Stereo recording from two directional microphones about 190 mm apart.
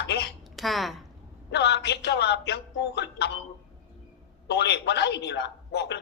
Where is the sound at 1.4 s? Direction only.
60° left (ahead or behind).